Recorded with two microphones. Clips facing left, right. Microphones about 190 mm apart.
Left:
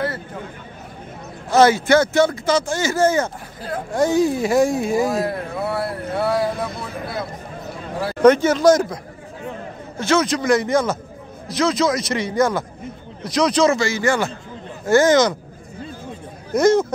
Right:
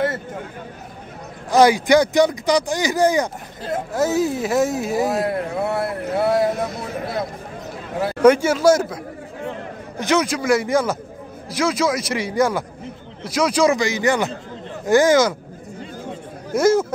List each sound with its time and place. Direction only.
1.5 s speech: 15° right (ahead or behind)
3.9 s speech: 5° right (ahead or behind)
5.2 s speech: 25° right (ahead or behind)
8.2 s speech: 10° right (ahead or behind)
16.5 s speech: 5° right (ahead or behind)